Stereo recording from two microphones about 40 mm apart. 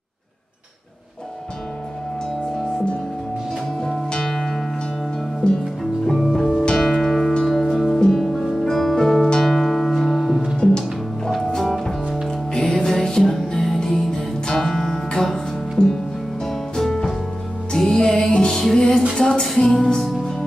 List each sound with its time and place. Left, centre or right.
3.8 s music: centre
10.5 s music: centre
16.4 s music: centre